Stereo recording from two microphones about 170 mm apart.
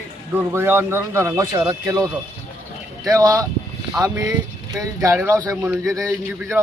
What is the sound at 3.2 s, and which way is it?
Speech, 20° right (ahead or behind).